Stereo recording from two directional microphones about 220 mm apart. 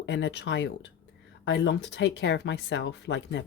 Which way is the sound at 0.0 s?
55° left (ahead or behind).